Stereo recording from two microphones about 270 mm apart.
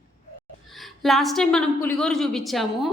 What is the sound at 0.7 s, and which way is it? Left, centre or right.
A woman's voice, centre.